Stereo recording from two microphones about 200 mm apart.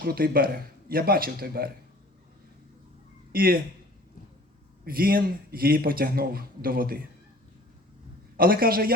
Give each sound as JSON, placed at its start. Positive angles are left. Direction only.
{"t": 0.0, "sound": "speech", "side_deg": -45}
{"t": 3.3, "sound": "speech", "side_deg": -45}
{"t": 4.9, "sound": "speech", "side_deg": -45}
{"t": 8.4, "sound": "speech", "side_deg": -45}